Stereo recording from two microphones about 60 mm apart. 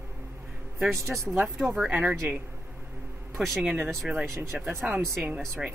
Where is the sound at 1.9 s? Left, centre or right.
Right.